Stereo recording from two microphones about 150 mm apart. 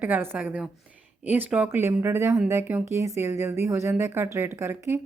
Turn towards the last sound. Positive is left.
turn(degrees=-15)  # may be behind; listen again after turning